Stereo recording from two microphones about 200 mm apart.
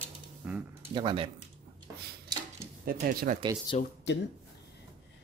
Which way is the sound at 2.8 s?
45° right (ahead or behind).